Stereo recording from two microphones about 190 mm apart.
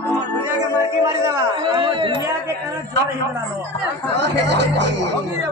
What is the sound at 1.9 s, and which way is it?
Speech, 25° right (ahead or behind).